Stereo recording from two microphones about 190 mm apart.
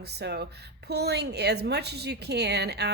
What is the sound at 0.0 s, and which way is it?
A woman's voice, 60° right (ahead or behind).